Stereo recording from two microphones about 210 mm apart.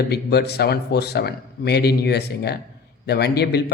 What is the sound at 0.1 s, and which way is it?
A man's voice, 50° left (ahead or behind).